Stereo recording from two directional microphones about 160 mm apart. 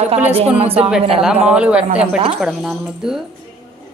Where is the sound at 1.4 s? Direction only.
5° right (ahead or behind).